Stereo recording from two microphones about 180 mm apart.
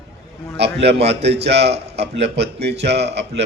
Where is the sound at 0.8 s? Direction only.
70° right (ahead or behind).